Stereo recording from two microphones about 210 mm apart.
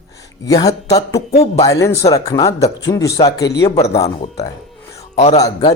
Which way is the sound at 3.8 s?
30° left (ahead or behind).